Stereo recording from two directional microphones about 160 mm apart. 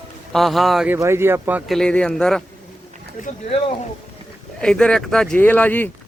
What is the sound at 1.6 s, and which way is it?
Speech, 5° left (ahead or behind).